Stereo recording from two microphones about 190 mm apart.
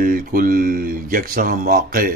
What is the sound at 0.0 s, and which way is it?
Speech, 50° right (ahead or behind).